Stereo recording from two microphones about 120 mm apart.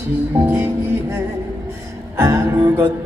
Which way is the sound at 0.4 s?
20° right (ahead or behind).